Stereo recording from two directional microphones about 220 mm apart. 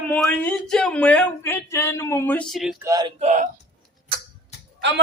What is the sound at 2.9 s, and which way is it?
Speech, 20° right (ahead or behind).